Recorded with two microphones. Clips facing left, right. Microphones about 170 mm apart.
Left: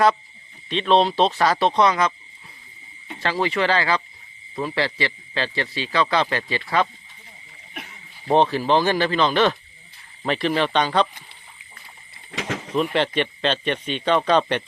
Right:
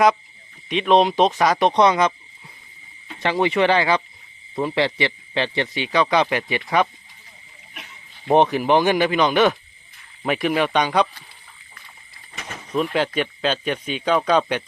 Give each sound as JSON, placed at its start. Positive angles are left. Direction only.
{"t": 0.7, "sound": "speech", "side_deg": -15}
{"t": 3.2, "sound": "speech", "side_deg": -20}
{"t": 8.3, "sound": "speech", "side_deg": -15}
{"t": 12.3, "sound": "a sound", "side_deg": 90}
{"t": 12.7, "sound": "speech", "side_deg": -5}